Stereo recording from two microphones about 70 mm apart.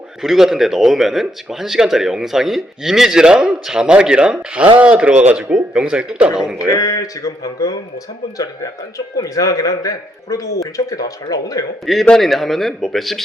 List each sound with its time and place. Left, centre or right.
0.2 s speech: centre
6.7 s a man's voice: left
9.1 s a man's voice: left
11.9 s speech: centre